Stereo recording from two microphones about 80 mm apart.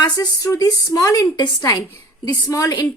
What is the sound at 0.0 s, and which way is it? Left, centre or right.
A woman's voice, left.